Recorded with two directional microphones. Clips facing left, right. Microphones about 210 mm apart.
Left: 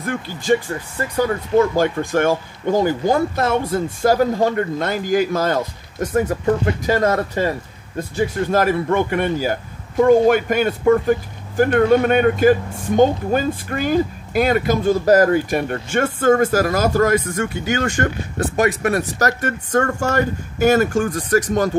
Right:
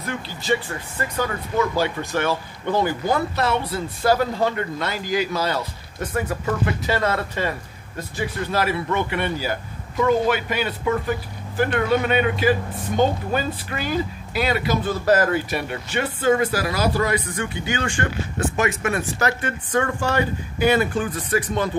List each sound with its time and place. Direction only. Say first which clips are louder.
0.0 s speech: left 5 dB; 50° left (ahead or behind)
1.8 s speech: left 5 dB; 50° left (ahead or behind)